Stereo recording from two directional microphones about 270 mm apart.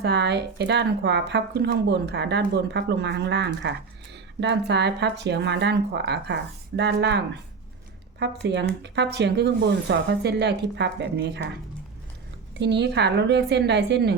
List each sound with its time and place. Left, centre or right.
0.0 s speech: right
8.2 s speech: right
12.5 s speech: right